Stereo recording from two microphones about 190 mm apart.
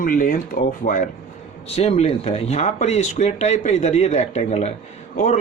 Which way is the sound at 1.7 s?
30° left (ahead or behind).